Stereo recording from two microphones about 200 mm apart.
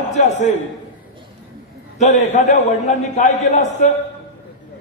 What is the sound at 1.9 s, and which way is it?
A man's voice, 35° left (ahead or behind).